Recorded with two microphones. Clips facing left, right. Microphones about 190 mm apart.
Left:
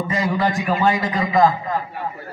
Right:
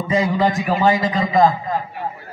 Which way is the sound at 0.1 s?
20° right (ahead or behind).